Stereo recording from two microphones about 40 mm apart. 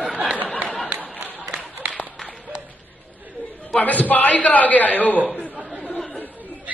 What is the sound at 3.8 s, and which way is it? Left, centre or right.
A man's voice, left.